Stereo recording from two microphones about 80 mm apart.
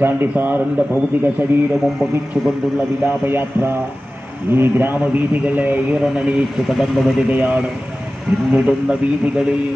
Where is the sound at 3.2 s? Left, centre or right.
Right.